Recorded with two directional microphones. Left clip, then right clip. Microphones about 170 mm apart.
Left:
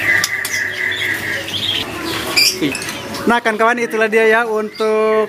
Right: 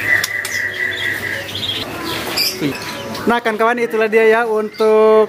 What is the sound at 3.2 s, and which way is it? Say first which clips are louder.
Speech: left 1 dB; centre (ahead or behind).